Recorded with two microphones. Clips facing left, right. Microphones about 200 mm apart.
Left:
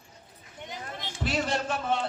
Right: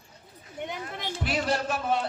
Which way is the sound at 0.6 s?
60° right (ahead or behind).